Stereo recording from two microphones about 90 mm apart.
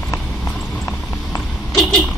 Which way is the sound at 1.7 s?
5° left (ahead or behind).